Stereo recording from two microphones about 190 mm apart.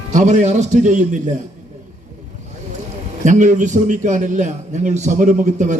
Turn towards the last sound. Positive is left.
turn(degrees=-40)  # may be behind; listen again after turning